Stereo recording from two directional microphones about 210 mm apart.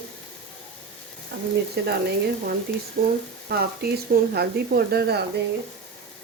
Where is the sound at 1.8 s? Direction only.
50° right (ahead or behind).